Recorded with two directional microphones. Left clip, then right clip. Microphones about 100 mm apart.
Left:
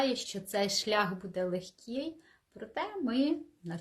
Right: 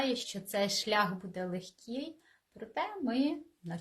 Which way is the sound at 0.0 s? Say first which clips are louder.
Left 2 dB; 40° left (ahead or behind).